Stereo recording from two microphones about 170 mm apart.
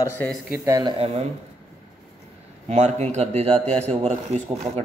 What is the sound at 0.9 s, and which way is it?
Speech, 35° right (ahead or behind).